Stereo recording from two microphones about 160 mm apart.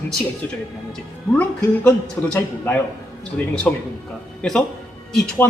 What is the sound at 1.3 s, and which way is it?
A man's voice, 10° left (ahead or behind).